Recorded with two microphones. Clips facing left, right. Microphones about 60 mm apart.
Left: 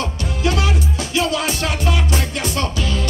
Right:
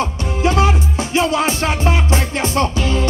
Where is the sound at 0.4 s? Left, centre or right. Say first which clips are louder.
Right 5 dB; right.